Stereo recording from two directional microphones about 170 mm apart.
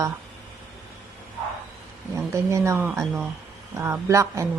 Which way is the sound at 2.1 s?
15° right (ahead or behind).